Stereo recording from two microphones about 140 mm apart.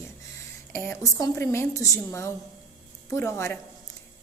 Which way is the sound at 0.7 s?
20° left (ahead or behind).